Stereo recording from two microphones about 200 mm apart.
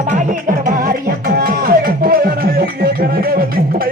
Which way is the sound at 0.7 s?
45° right (ahead or behind).